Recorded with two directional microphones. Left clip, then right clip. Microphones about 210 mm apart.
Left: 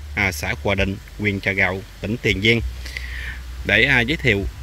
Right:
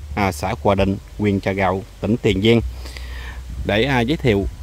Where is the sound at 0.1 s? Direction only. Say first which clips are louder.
Even; 20° right (ahead or behind).